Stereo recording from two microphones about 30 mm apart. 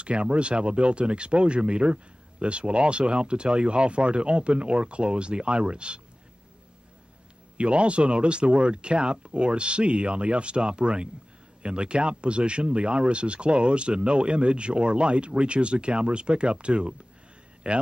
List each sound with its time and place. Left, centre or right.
0.0 s speech: right
7.5 s speech: right